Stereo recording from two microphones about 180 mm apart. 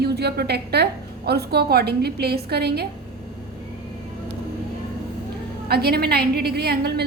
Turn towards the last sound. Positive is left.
turn(degrees=-60)  # may be behind; listen again after turning